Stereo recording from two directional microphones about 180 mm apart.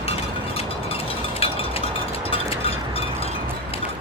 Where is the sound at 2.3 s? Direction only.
30° left (ahead or behind).